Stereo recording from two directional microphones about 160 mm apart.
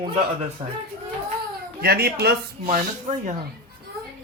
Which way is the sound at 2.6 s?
50° right (ahead or behind).